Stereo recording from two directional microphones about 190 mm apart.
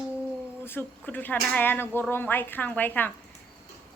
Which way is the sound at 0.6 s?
10° left (ahead or behind).